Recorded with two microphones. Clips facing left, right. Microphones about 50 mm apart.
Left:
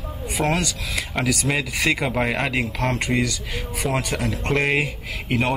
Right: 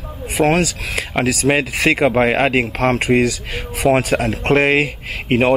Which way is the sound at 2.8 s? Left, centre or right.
Right.